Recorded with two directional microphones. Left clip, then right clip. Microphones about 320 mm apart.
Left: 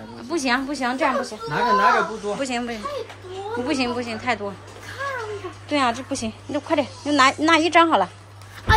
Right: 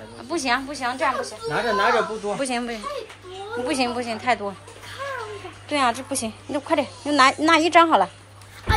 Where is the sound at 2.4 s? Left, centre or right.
Centre.